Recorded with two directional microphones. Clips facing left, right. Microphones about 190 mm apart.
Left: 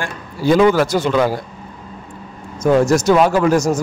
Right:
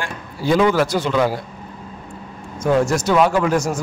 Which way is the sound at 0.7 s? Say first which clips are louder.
Left 2 dB; 45° left (ahead or behind).